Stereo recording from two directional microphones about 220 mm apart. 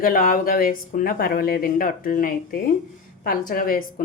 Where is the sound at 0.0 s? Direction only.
40° left (ahead or behind).